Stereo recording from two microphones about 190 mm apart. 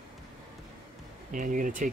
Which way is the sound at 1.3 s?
45° right (ahead or behind).